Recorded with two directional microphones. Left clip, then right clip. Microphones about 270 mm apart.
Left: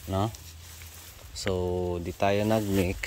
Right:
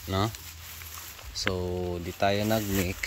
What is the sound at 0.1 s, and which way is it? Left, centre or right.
Speech, centre.